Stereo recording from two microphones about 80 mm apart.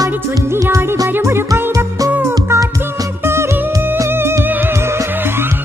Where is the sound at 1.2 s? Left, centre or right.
Right.